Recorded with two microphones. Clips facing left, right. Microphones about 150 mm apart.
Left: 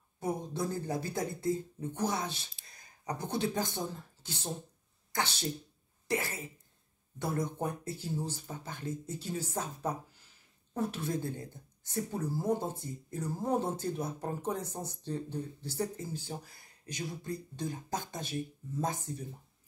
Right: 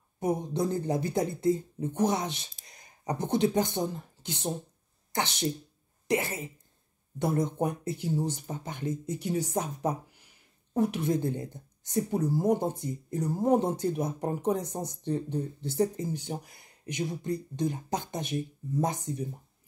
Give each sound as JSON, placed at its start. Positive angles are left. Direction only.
{"t": 0.2, "sound": "a woman's voice", "side_deg": -20}